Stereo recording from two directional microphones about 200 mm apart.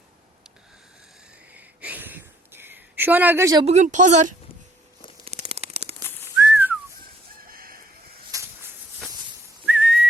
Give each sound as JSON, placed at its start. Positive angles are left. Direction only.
{"t": 1.5, "sound": "a sound", "side_deg": -10}
{"t": 3.7, "sound": "speech", "side_deg": -35}
{"t": 5.2, "sound": "a sound", "side_deg": -30}
{"t": 6.3, "sound": "whistling", "side_deg": -10}
{"t": 7.4, "sound": "chicken", "side_deg": -45}
{"t": 8.3, "sound": "walk", "side_deg": -15}
{"t": 9.6, "sound": "whistling", "side_deg": -5}